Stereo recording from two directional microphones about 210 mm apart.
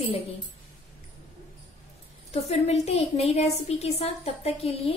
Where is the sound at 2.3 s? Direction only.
30° left (ahead or behind).